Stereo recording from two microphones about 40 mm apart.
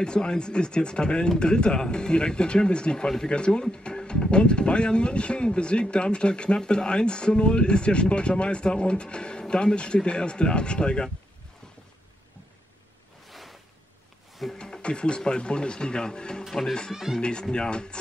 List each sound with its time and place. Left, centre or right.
0.0 s speech: left
13.3 s a sound: centre
14.6 s speech: left
16.4 s speech: centre
17.2 s speech: left